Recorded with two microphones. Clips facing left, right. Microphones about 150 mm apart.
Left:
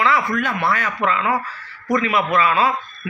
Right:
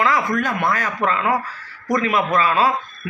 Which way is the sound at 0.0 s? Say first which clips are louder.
Even; 40° right (ahead or behind).